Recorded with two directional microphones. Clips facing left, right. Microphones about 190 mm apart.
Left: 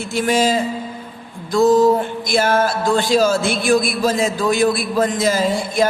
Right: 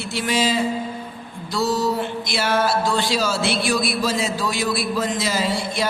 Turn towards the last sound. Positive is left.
turn(degrees=50)  # may be behind; listen again after turning